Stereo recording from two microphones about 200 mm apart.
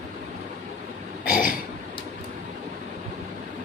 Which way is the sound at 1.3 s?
45° left (ahead or behind).